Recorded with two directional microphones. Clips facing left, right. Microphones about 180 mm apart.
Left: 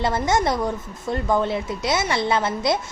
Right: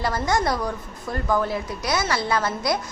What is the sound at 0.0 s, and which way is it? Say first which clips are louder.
A woman's voice: left 2 dB; 25° left (ahead or behind).